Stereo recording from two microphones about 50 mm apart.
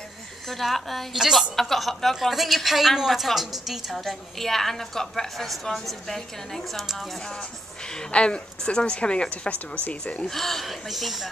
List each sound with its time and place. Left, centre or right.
0.5 s a woman's voice: centre
1.1 s a woman's voice: centre
1.6 s a woman's voice: centre
4.0 s a woman's voice: centre
7.2 s speech: centre; by 10.2 s left
10.2 s a woman's voice: centre